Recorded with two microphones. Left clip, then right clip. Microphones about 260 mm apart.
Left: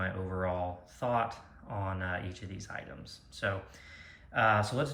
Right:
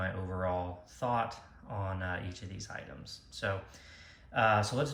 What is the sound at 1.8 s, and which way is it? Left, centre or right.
Speech, centre.